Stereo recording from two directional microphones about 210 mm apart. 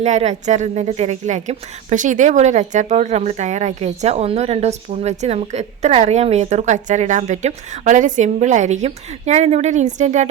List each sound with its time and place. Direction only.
0.0 s a woman's voice: 35° right (ahead or behind)